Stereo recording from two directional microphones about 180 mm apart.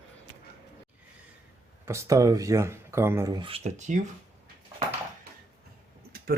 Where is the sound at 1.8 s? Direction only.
15° right (ahead or behind); by 4.0 s 40° right (ahead or behind).